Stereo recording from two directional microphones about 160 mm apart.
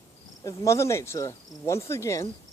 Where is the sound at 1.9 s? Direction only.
20° left (ahead or behind).